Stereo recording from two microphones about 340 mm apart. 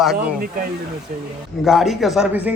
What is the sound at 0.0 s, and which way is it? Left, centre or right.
Speech, centre.